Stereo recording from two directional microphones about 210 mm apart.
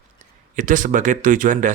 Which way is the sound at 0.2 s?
35° right (ahead or behind).